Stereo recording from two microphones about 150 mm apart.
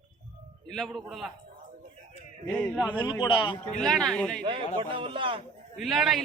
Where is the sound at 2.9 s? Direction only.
30° left (ahead or behind).